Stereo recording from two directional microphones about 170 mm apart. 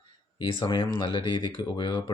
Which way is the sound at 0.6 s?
30° left (ahead or behind).